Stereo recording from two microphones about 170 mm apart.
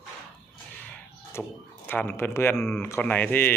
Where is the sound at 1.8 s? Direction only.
10° left (ahead or behind).